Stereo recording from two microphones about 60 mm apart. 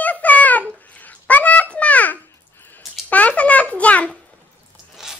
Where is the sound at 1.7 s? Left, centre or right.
Left.